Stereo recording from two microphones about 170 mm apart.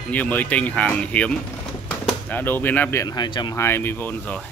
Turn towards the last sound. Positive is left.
turn(degrees=10)  # may be behind; listen again after turning